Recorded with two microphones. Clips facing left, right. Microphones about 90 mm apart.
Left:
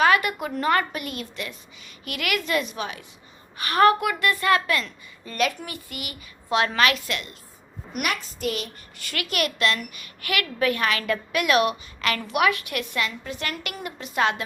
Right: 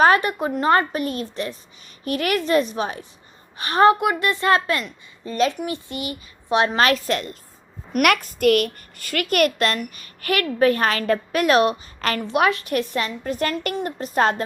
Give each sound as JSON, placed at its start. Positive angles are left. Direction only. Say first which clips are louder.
{"t": 0.0, "sound": "a woman's voice", "louder": "right 4 dB", "side_deg": -35}
{"t": 6.8, "sound": "a woman's voice", "louder": "right 4 dB", "side_deg": -35}
{"t": 8.0, "sound": "a child's voice", "louder": "right 10 dB", "side_deg": -60}
{"t": 9.0, "sound": "a woman's voice", "louder": "right 8 dB", "side_deg": -45}